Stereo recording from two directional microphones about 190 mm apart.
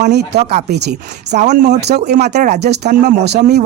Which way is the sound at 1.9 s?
60° right (ahead or behind).